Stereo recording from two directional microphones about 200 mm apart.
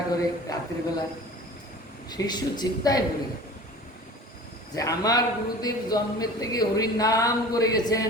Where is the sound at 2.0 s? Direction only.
20° left (ahead or behind).